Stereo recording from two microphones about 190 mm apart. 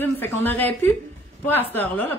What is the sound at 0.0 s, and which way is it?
Speech, 10° left (ahead or behind).